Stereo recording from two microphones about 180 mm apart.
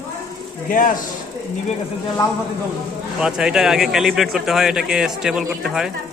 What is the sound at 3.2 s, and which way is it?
Speech, 5° right (ahead or behind).